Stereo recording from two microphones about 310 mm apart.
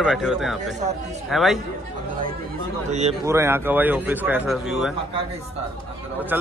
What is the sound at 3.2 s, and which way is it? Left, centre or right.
Speech, centre.